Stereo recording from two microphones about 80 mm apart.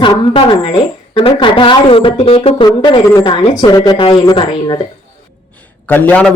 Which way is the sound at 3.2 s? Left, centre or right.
Left.